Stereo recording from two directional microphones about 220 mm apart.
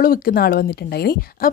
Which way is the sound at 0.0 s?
40° left (ahead or behind).